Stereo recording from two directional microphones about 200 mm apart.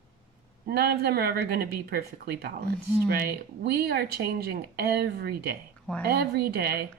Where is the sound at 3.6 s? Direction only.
50° right (ahead or behind).